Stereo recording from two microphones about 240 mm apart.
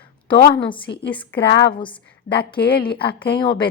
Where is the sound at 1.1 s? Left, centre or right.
Centre.